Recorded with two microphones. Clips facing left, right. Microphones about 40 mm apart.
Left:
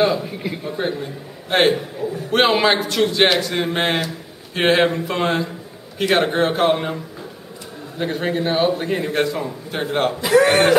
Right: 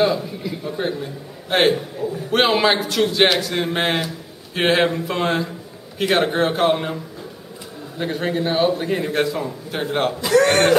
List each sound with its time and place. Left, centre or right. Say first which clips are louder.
0.2 s a man's voice: left 1 dB; left
0.7 s a man's voice: even; centre
8.0 s a man's voice: left 1 dB; centre